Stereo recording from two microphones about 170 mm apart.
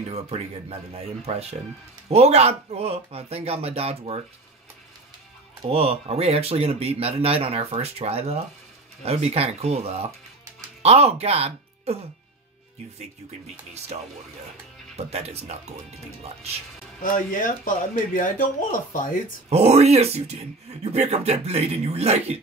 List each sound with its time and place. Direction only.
0.1 s speech: 35° right (ahead or behind)
5.7 s speech: 35° right (ahead or behind)
13.9 s speech: 45° right (ahead or behind)
17.0 s speech: 50° left (ahead or behind)
19.5 s speech: 40° right (ahead or behind)